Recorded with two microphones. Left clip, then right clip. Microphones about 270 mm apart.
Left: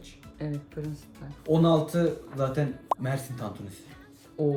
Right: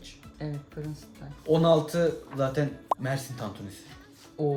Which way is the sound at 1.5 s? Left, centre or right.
Centre.